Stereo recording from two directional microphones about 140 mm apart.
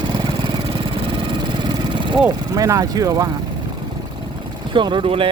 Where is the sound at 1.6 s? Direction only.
35° right (ahead or behind).